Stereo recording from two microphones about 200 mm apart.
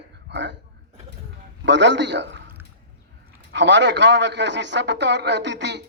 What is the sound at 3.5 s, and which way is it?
A man's voice, 60° right (ahead or behind).